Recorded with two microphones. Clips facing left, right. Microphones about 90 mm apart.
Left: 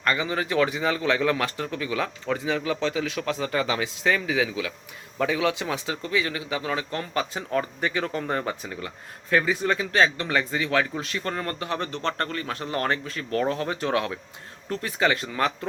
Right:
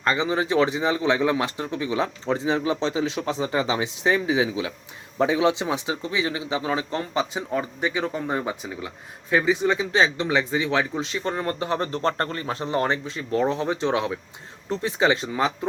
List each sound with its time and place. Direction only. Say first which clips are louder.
0.0 s speech: right 3 dB; 25° right (ahead or behind)